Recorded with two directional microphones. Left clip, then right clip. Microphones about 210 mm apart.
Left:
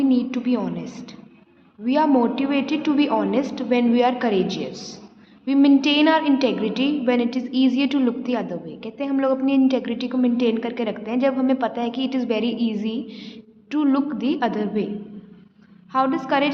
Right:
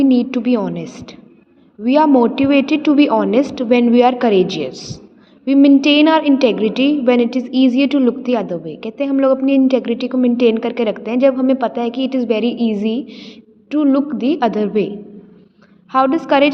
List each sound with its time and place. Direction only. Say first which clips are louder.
0.0 s a woman's voice: right 7 dB; 25° right (ahead or behind)
15.9 s a woman's voice: right 7 dB; 25° right (ahead or behind)